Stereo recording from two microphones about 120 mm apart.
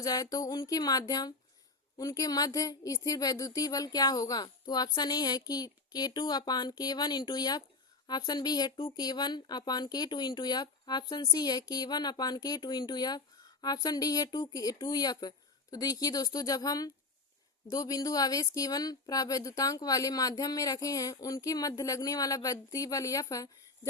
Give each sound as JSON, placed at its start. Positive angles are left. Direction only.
{"t": 0.0, "sound": "speech", "side_deg": 30}